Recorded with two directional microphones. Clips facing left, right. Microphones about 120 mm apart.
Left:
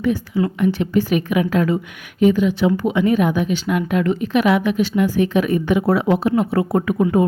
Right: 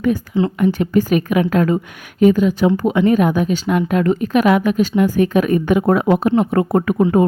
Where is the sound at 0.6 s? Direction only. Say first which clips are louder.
Right 2 dB; 45° right (ahead or behind).